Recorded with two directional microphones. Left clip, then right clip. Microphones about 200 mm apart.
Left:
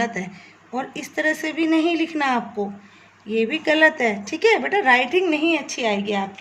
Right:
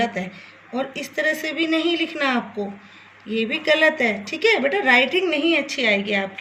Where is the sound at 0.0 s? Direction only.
50° left (ahead or behind).